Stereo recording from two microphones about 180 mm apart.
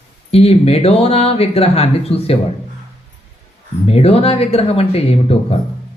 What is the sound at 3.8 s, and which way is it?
Speech, 35° left (ahead or behind).